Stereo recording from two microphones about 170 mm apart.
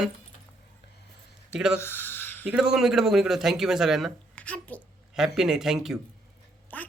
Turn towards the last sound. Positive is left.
turn(degrees=10)  # may be behind; listen again after turning